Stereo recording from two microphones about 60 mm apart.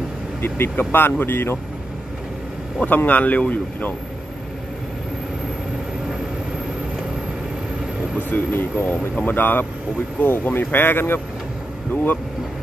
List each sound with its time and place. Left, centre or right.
0.4 s speech: left
2.9 s speech: left
8.3 s speech: left